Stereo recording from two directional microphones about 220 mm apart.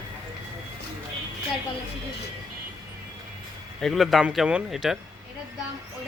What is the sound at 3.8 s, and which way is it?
Speech, centre (ahead or behind).